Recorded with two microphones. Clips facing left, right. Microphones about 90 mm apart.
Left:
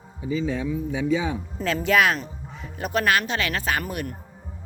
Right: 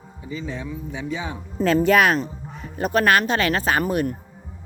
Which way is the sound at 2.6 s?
45° right (ahead or behind).